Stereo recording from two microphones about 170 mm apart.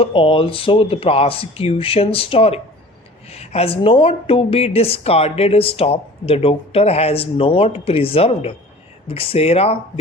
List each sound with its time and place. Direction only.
0.0 s speech: 30° left (ahead or behind)